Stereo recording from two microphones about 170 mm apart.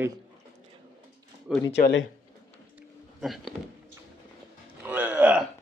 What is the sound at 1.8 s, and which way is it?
Speech, 90° left.